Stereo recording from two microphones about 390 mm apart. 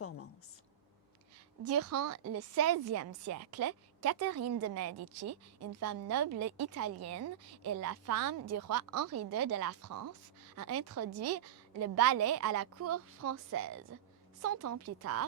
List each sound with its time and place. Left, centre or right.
1.6 s a woman's voice: right